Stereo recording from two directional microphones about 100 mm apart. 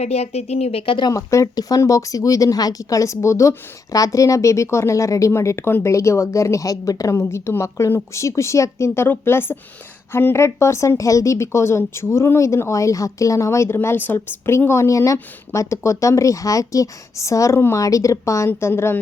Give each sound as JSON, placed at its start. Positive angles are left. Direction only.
{"t": 0.0, "sound": "speech", "side_deg": 90}
{"t": 1.1, "sound": "a woman's voice", "side_deg": 30}